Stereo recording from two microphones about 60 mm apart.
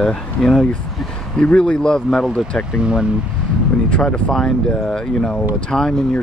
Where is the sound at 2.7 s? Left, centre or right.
Centre.